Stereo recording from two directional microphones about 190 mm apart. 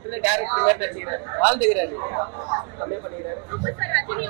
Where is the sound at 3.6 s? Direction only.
20° right (ahead or behind).